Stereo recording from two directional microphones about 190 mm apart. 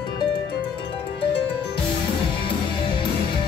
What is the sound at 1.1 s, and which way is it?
Music, 25° left (ahead or behind).